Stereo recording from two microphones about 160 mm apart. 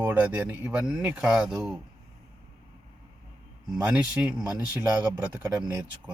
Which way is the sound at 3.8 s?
5° right (ahead or behind).